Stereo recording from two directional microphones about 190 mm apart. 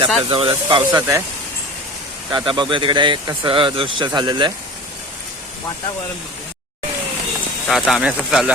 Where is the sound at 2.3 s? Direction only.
25° right (ahead or behind).